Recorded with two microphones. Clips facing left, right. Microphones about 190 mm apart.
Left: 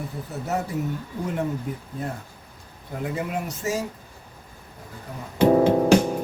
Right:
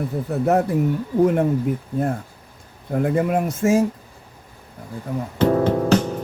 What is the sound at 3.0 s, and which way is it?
Speech, 50° right (ahead or behind).